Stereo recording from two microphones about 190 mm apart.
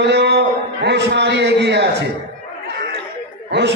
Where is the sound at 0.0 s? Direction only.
65° right (ahead or behind).